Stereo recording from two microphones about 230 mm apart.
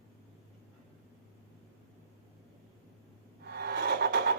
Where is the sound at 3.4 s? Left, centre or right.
Right.